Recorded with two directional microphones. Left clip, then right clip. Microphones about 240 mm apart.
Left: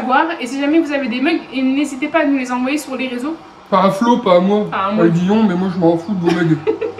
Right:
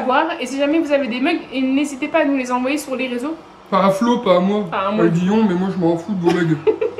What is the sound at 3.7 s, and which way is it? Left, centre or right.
Speech, centre.